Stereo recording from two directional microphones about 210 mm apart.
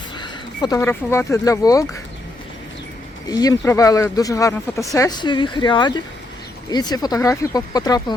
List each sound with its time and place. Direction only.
0.2 s a sound: 20° left (ahead or behind)
0.8 s speech: 10° left (ahead or behind)
3.2 s speech: 15° left (ahead or behind)